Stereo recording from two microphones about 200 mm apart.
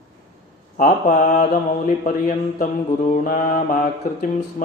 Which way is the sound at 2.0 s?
45° left (ahead or behind).